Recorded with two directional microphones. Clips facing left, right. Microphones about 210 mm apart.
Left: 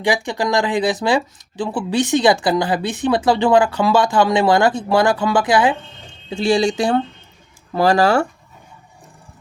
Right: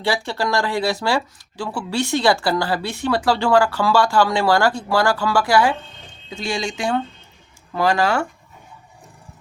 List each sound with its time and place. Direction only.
0.0 s speech: 15° left (ahead or behind)
6.3 s speech: 35° left (ahead or behind)